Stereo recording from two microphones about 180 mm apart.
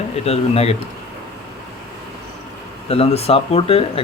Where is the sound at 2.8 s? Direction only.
30° left (ahead or behind).